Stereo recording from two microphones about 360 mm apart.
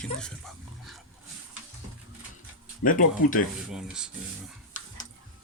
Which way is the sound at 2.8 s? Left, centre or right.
Left.